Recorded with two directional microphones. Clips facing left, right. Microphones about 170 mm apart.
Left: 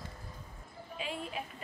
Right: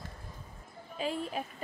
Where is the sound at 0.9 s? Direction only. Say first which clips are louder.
Right 5 dB; 40° right (ahead or behind).